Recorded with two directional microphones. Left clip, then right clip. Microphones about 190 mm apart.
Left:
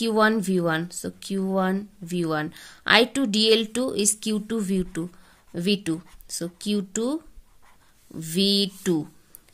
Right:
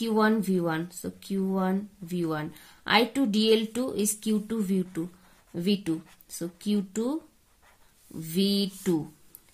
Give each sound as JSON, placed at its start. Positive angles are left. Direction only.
{"t": 0.0, "sound": "speech", "side_deg": 45}